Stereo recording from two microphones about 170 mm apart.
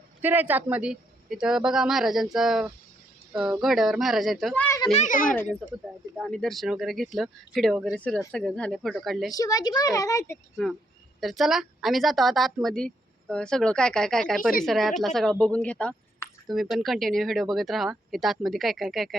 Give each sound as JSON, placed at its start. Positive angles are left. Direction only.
{"t": 0.2, "sound": "a woman's voice", "side_deg": -10}
{"t": 4.9, "sound": "a child's voice", "side_deg": 50}
{"t": 6.1, "sound": "a woman's voice", "side_deg": 0}
{"t": 9.3, "sound": "a woman's voice", "side_deg": 20}
{"t": 11.2, "sound": "a woman's voice", "side_deg": 0}